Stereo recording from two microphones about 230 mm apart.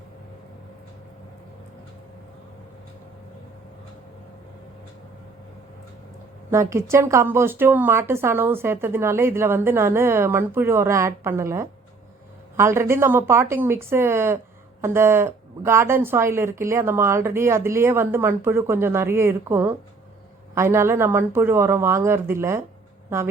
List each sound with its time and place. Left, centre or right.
6.5 s a woman's voice: centre